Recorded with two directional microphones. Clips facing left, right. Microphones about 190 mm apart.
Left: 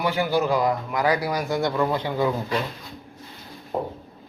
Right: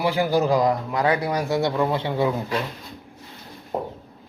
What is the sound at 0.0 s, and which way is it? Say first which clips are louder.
Speech: right 2 dB; 30° right (ahead or behind).